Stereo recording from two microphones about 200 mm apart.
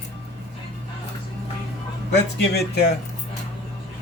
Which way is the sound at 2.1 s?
55° left (ahead or behind).